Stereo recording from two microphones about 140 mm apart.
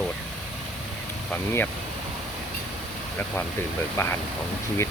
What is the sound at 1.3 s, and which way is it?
Speech, 15° left (ahead or behind).